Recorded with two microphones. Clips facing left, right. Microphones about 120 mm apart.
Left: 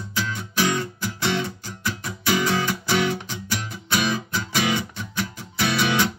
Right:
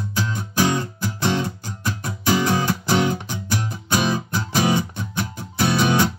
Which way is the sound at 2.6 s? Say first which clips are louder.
Right 3 dB; 40° right (ahead or behind).